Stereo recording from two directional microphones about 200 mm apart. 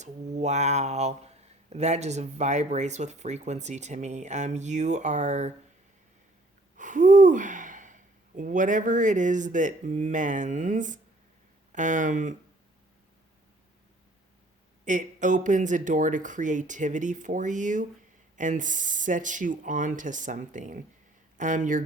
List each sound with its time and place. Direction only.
0.0 s speech: 35° right (ahead or behind)
6.7 s speech: 40° right (ahead or behind)
14.8 s speech: 40° right (ahead or behind)